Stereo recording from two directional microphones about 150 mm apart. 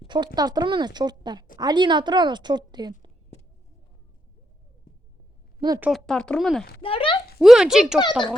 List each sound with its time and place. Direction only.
0.3 s a woman's voice: 25° right (ahead or behind)
5.5 s a woman's voice: 25° right (ahead or behind)
5.9 s speech: 5° left (ahead or behind)
6.8 s speech: 35° left (ahead or behind)
7.3 s speech: centre (ahead or behind)